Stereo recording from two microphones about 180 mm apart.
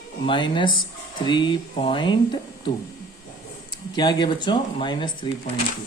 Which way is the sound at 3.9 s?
25° left (ahead or behind).